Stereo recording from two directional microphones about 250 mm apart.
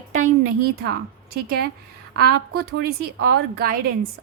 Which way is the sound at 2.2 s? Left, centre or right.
Right.